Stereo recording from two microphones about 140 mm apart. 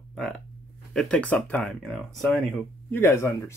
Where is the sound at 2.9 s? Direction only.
15° left (ahead or behind).